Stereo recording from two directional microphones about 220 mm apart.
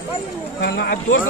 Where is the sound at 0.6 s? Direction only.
45° left (ahead or behind).